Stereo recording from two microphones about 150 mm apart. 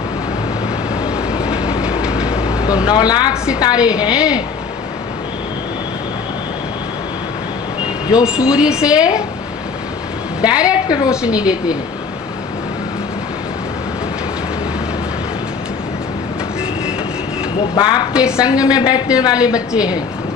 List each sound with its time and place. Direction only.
1.0 s train: 5° right (ahead or behind)
2.8 s a woman's voice: 30° left (ahead or behind)
3.8 s a woman's voice: 5° right (ahead or behind)
8.2 s a woman's voice: 5° right (ahead or behind)
10.5 s a woman's voice: 25° left (ahead or behind)
11.1 s a woman's voice: 5° right (ahead or behind)
17.7 s a woman's voice: 30° left (ahead or behind)
18.1 s a woman's voice: 5° right (ahead or behind)
18.5 s a woman's voice: 25° left (ahead or behind)
19.5 s a woman's voice: 5° right (ahead or behind)